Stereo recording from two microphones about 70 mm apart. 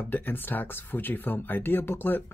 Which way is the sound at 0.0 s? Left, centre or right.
Left.